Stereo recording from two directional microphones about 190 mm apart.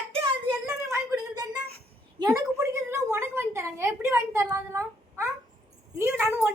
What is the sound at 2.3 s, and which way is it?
A woman's voice, 15° right (ahead or behind).